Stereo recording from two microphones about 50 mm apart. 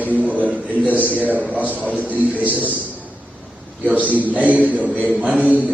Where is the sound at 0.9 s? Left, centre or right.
Right.